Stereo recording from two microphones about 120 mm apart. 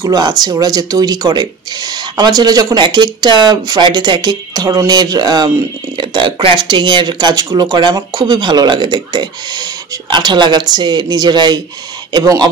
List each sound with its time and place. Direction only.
0.0 s speech: 35° right (ahead or behind)